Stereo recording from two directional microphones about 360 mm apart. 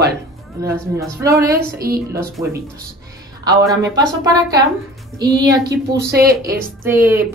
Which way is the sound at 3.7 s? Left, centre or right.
Centre.